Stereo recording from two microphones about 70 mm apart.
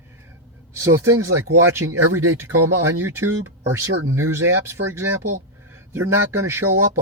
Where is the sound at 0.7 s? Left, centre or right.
Right.